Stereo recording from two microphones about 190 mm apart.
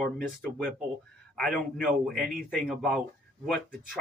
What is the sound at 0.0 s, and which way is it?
Speech, 5° left (ahead or behind).